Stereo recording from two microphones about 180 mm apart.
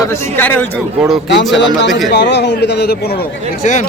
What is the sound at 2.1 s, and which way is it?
A man's voice, 75° left (ahead or behind).